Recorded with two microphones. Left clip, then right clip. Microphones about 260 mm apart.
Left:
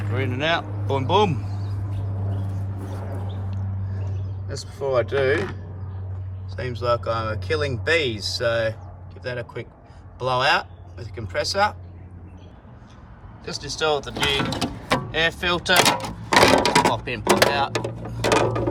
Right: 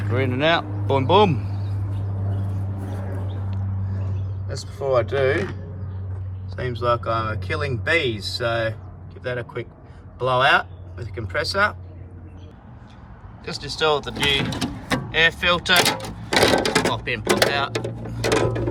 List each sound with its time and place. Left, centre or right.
0.0 s speech: centre
4.4 s speech: centre
6.6 s speech: centre
13.4 s speech: centre
14.1 s speech: left
15.1 s speech: centre
15.8 s speech: centre
16.3 s a sound: centre
16.9 s speech: centre
17.2 s speech: centre